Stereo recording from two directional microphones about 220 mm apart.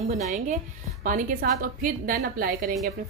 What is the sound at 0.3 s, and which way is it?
A woman's voice, 35° right (ahead or behind).